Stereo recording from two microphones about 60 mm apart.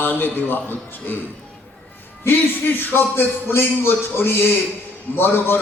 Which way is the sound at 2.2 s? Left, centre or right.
Left.